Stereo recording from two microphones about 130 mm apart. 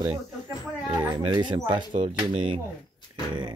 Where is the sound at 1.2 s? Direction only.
35° right (ahead or behind).